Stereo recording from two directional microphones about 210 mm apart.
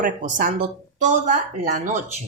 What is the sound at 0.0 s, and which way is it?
Speech, 40° right (ahead or behind).